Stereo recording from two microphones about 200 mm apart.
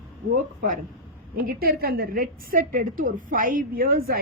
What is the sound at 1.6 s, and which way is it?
A woman's voice, 50° right (ahead or behind).